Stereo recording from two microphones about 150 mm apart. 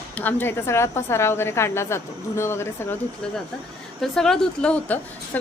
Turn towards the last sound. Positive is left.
turn(degrees=10)  # may be behind; listen again after turning